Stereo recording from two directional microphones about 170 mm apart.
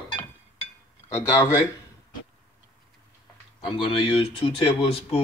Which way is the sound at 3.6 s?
30° left (ahead or behind).